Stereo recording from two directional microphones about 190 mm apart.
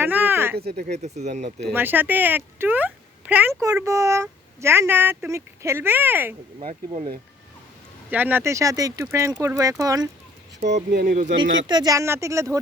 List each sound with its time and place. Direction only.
0.0 s speech: 10° right (ahead or behind)
0.5 s speech: 55° right (ahead or behind)
0.8 s speech: 35° right (ahead or behind)
1.7 s speech: 10° right (ahead or behind)
8.1 s speech: 10° right (ahead or behind)
10.9 s speech: 45° right (ahead or behind)
11.6 s speech: 20° right (ahead or behind)